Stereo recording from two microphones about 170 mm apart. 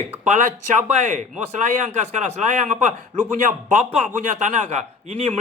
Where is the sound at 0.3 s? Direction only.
45° right (ahead or behind).